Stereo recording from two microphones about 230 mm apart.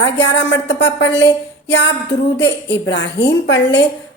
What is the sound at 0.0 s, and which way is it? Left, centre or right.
A woman's voice, left.